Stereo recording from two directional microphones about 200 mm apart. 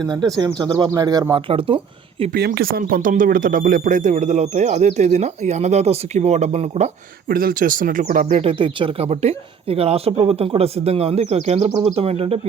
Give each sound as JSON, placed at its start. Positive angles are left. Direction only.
{"t": 0.3, "sound": "speech", "side_deg": -20}
{"t": 2.3, "sound": "speech", "side_deg": -50}